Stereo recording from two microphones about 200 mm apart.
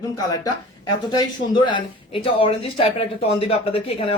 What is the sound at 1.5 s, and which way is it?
Speech, 25° left (ahead or behind).